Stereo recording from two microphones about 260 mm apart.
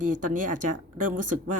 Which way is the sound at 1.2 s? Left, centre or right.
Right.